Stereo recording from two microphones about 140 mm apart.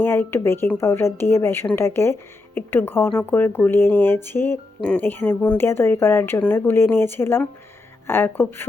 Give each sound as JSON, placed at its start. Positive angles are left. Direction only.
{"t": 0.0, "sound": "speech", "side_deg": 15}